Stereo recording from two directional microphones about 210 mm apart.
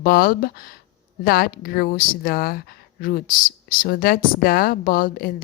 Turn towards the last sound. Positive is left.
turn(degrees=45)  # may be behind; listen again after turning